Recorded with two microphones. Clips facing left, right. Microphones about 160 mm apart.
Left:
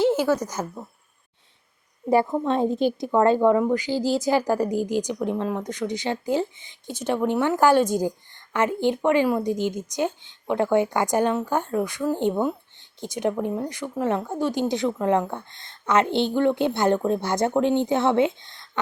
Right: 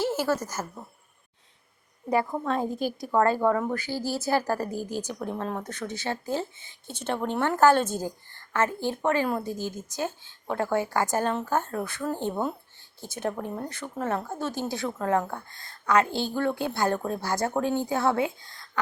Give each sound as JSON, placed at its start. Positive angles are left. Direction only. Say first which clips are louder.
{"t": 0.0, "sound": "a sound", "louder": "left 6 dB", "side_deg": 15}
{"t": 0.4, "sound": "speech", "louder": "left 4 dB", "side_deg": 15}
{"t": 2.4, "sound": "speech", "louder": "left 6 dB", "side_deg": 25}